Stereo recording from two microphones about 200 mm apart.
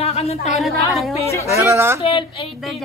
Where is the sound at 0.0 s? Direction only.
30° left (ahead or behind).